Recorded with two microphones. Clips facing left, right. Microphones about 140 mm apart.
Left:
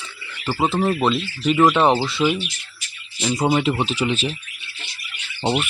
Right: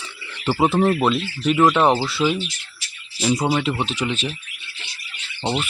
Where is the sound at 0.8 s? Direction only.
Centre (ahead or behind).